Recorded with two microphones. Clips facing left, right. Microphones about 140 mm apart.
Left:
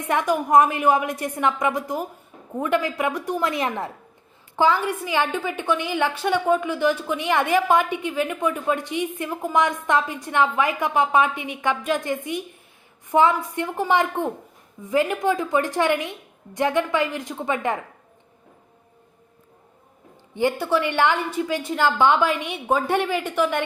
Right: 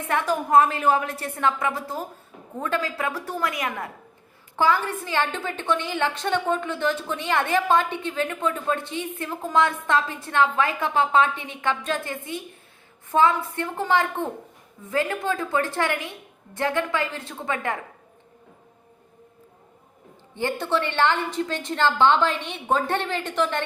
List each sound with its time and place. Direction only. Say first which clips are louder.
0.0 s a woman's voice: left 2 dB; 15° left (ahead or behind)
3.4 s a woman's voice: left 2 dB; 25° left (ahead or behind)
4.5 s a woman's voice: left 2 dB; 15° left (ahead or behind)
20.3 s a woman's voice: left 3 dB; 10° left (ahead or behind)